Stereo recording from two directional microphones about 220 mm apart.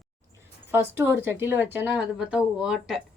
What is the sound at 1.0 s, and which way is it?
Speech, 10° right (ahead or behind).